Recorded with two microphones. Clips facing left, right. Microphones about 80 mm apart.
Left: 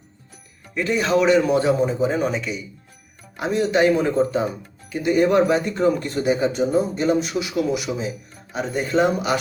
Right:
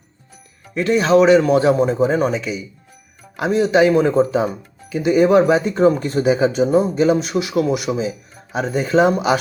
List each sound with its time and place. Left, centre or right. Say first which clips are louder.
0.8 s speech: right 6 dB; right
2.4 s speech: right 3 dB; right